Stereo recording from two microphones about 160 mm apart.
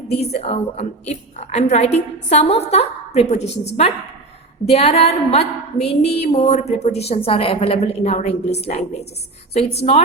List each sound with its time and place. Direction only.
0.1 s a woman's voice: 40° left (ahead or behind)